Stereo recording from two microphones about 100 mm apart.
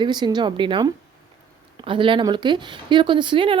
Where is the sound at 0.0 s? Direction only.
45° right (ahead or behind).